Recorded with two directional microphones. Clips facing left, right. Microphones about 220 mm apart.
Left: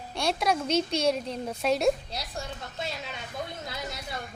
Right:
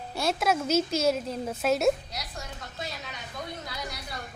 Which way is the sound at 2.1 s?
30° left (ahead or behind).